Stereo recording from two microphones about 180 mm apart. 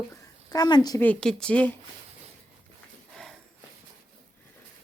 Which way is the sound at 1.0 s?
5° left (ahead or behind).